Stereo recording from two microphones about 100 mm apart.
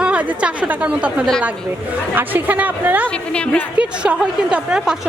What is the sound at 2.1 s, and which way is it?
A woman's voice, 15° right (ahead or behind).